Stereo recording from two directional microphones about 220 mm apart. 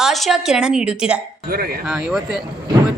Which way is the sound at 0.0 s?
Centre (ahead or behind).